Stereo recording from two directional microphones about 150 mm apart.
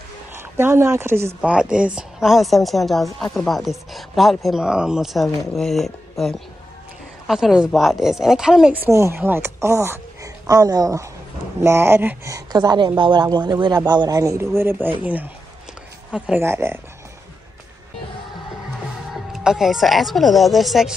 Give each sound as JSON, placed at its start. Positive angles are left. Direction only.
{"t": 0.3, "sound": "speech", "side_deg": -15}
{"t": 8.8, "sound": "speech", "side_deg": -15}
{"t": 12.4, "sound": "speech", "side_deg": -25}
{"t": 19.1, "sound": "speech", "side_deg": 0}